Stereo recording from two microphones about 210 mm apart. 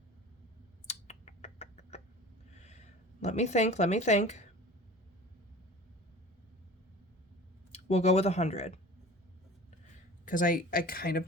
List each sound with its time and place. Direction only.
0.9 s finger snapping: 30° left (ahead or behind)
2.6 s speech: 30° left (ahead or behind)
7.7 s speech: 30° left (ahead or behind)
10.2 s speech: 40° left (ahead or behind)